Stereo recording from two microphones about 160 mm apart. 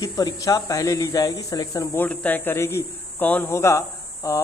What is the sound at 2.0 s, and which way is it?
A man's voice, 10° left (ahead or behind).